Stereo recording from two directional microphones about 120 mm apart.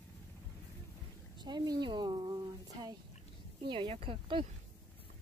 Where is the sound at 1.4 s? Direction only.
35° right (ahead or behind).